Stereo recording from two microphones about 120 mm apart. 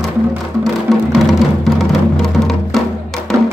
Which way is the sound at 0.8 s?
Centre (ahead or behind).